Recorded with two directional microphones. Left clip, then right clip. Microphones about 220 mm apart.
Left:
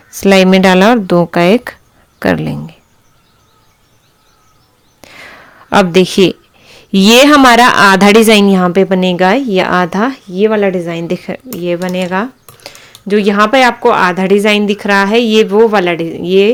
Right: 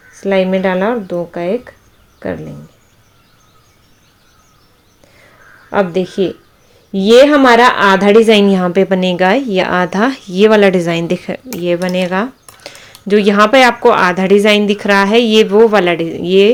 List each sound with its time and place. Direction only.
0.2 s speech: 35° left (ahead or behind)
4.9 s speech: 40° left (ahead or behind); by 16.5 s 10° left (ahead or behind)